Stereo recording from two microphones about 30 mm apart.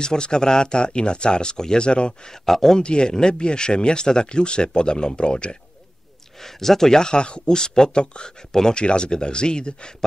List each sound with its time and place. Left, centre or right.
0.0 s speech: left
2.4 s speech: centre
2.8 s speech: left
6.4 s speech: centre; by 9.8 s left